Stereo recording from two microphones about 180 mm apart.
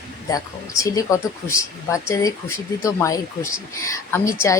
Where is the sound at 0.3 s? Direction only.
20° left (ahead or behind).